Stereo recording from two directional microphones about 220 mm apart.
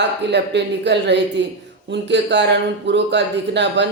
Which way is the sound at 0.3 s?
50° right (ahead or behind).